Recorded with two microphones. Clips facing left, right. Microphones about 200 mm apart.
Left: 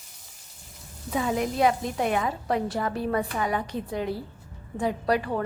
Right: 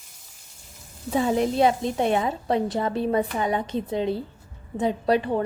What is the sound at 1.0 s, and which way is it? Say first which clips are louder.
A woman's voice: right 4 dB; 30° right (ahead or behind).